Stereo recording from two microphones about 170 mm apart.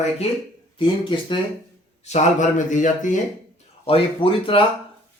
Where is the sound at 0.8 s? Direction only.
30° left (ahead or behind).